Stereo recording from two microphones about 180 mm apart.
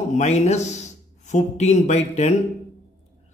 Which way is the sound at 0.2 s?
40° left (ahead or behind).